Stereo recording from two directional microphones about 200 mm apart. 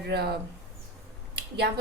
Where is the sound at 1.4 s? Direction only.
55° right (ahead or behind).